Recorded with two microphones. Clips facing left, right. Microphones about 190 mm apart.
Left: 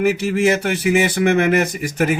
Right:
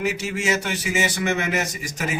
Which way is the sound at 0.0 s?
60° left (ahead or behind).